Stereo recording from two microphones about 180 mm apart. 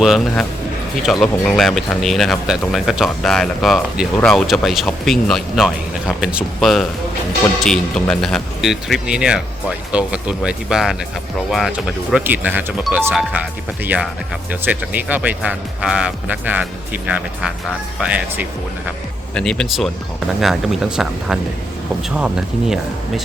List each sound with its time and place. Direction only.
0.0 s speech: centre (ahead or behind)
19.3 s speech: 5° left (ahead or behind)